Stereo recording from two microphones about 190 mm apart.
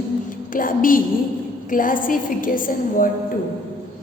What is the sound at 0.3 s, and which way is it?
A woman's voice, 45° left (ahead or behind).